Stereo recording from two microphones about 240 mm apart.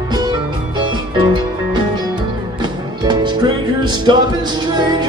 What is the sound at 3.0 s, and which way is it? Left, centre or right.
Music, centre.